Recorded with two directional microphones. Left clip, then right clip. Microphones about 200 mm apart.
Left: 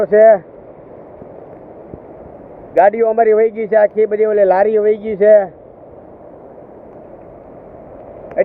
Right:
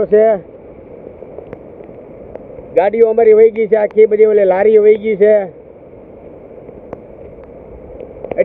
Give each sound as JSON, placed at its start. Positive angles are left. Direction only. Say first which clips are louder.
{"t": 0.0, "sound": "speech", "louder": "left 2 dB", "side_deg": 10}
{"t": 2.8, "sound": "speech", "louder": "even", "side_deg": 0}